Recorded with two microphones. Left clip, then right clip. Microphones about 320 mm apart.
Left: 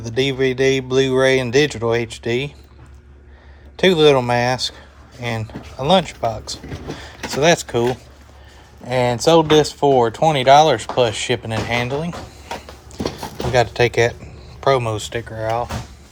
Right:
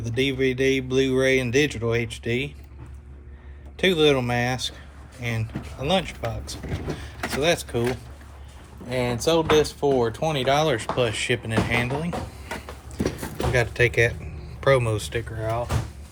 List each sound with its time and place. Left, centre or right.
0.0 s speech: centre
3.8 s speech: centre
8.9 s speech: left